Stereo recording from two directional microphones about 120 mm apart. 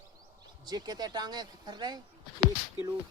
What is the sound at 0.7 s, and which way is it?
Speech, 35° right (ahead or behind).